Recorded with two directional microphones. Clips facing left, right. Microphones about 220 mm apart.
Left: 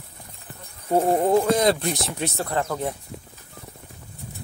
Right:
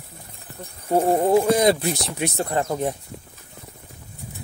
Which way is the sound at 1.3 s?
15° right (ahead or behind).